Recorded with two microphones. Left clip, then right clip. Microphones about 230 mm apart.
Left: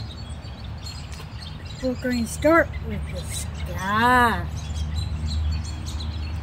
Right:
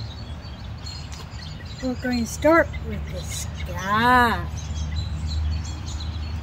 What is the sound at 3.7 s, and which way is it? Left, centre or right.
Speech, centre.